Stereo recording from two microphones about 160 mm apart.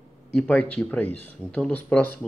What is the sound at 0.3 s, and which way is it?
Speech, 5° left (ahead or behind).